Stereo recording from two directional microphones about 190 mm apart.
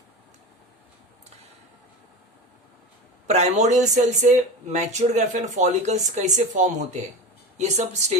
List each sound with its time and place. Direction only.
3.2 s speech: 35° right (ahead or behind)